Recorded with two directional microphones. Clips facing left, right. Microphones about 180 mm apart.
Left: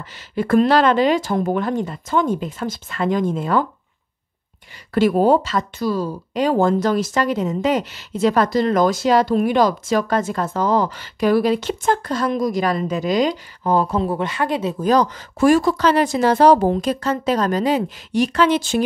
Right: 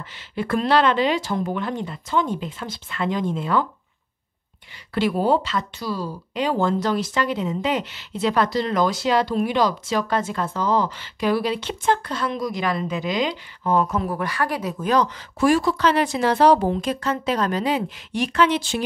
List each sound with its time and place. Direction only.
0.4 s speech: 45° left (ahead or behind)
4.9 s speech: 45° left (ahead or behind)